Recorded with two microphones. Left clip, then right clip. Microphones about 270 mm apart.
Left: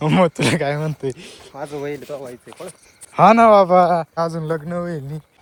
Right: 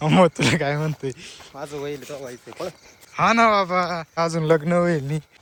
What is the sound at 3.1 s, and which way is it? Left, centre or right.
Speech, centre.